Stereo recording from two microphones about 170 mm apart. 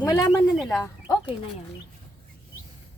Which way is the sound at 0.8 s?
20° left (ahead or behind).